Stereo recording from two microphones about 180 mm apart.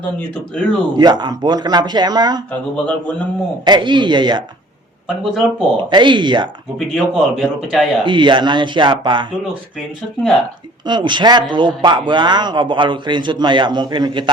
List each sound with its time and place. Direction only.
0.5 s a man's voice: 5° left (ahead or behind)
0.9 s speech: 25° right (ahead or behind)
2.5 s speech: 5° left (ahead or behind)
3.7 s speech: 25° right (ahead or behind)
5.0 s a man's voice: centre (ahead or behind)
5.7 s speech: 25° right (ahead or behind)
6.7 s a man's voice: centre (ahead or behind)
8.0 s speech: 25° right (ahead or behind)
10.8 s speech: 25° right (ahead or behind)